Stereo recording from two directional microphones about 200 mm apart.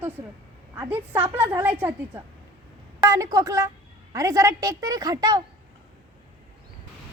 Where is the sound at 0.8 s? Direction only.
10° right (ahead or behind).